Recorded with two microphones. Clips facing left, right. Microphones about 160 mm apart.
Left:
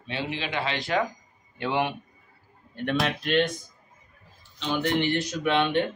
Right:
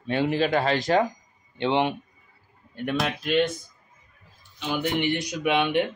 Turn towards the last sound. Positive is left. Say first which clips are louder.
# right 1 dB
turn(degrees=-15)  # may be behind; listen again after turning